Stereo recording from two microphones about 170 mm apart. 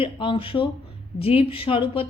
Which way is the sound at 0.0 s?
30° left (ahead or behind).